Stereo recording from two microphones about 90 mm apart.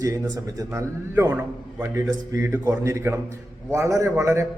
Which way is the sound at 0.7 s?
30° right (ahead or behind).